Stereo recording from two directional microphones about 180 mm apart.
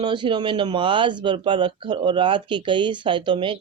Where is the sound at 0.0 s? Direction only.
25° right (ahead or behind).